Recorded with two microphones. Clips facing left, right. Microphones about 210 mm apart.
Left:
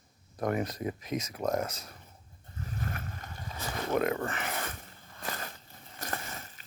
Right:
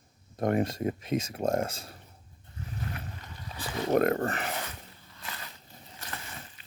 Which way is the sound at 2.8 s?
50° left (ahead or behind).